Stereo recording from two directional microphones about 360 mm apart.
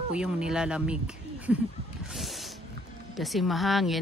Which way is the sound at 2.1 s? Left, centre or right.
Centre.